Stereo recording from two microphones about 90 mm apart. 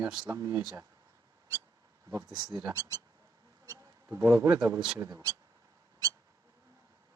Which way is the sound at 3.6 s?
35° right (ahead or behind).